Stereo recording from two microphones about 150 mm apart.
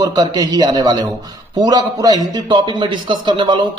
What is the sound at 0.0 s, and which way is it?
A man's voice, 25° right (ahead or behind).